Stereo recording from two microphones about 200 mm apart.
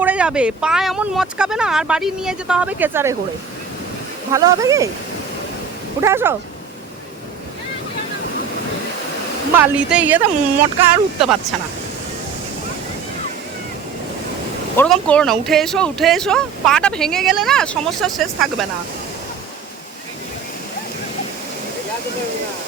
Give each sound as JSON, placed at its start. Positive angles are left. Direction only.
{"t": 0.0, "sound": "speech", "side_deg": -5}
{"t": 4.3, "sound": "speech", "side_deg": -15}
{"t": 6.0, "sound": "speech", "side_deg": -10}
{"t": 9.6, "sound": "speech", "side_deg": -10}
{"t": 14.8, "sound": "speech", "side_deg": 5}